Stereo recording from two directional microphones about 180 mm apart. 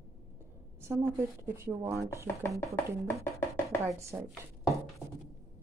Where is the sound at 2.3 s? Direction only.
10° left (ahead or behind).